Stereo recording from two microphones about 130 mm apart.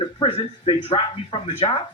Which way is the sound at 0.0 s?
45° left (ahead or behind).